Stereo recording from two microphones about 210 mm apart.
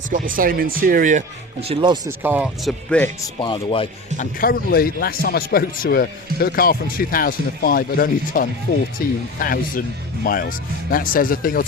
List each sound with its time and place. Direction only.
0.1 s speech: 40° right (ahead or behind)
1.6 s speech: 25° right (ahead or behind)
2.0 s speech: 10° right (ahead or behind)
2.9 s speech: 5° left (ahead or behind)
3.4 s speech: 25° left (ahead or behind)
4.4 s speech: 45° left (ahead or behind)